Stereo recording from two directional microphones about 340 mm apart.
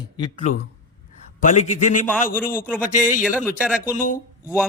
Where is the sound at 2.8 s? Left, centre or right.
Left.